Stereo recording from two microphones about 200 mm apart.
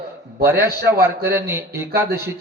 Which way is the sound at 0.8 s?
50° right (ahead or behind).